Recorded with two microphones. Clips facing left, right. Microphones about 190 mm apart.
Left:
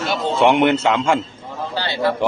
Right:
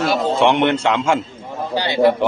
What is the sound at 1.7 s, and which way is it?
Speech, 15° right (ahead or behind).